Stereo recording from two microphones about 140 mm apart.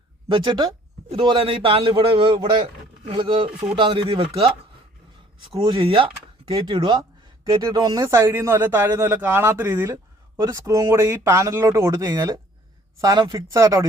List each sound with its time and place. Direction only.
0.3 s a man's voice: 35° right (ahead or behind)
5.4 s a man's voice: 35° right (ahead or behind)